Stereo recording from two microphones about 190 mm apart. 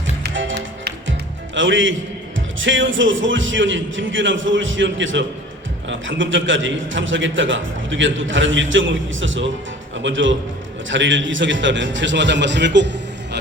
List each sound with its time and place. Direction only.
0.2 s music: 70° right (ahead or behind)
1.5 s a man's voice: 80° right